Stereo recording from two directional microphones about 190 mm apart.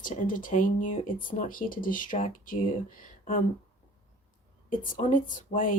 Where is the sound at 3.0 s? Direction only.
45° left (ahead or behind).